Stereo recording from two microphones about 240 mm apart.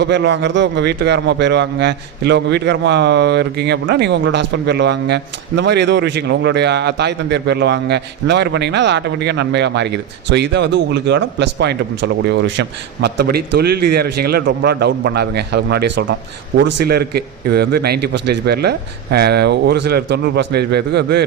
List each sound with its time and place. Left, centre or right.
0.0 s a man's voice: right